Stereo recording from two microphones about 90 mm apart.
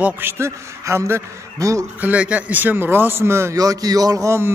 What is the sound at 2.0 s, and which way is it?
A man's voice, 15° right (ahead or behind).